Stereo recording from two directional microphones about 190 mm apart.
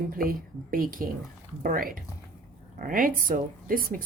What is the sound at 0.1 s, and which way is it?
Speech, 50° right (ahead or behind).